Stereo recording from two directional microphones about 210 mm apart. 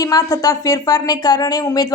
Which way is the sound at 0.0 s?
15° left (ahead or behind).